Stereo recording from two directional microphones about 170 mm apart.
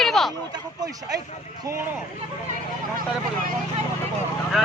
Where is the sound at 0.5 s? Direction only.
20° right (ahead or behind).